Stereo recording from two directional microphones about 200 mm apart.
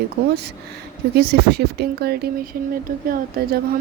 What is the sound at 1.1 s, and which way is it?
Speech, 55° right (ahead or behind).